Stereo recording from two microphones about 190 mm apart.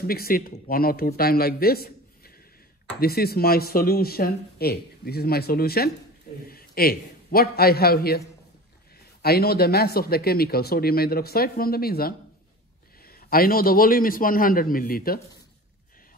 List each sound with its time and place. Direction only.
0.0 s a man's voice: 50° left (ahead or behind)
9.2 s speech: 55° left (ahead or behind)